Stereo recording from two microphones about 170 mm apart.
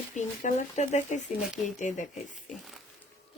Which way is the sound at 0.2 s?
45° left (ahead or behind).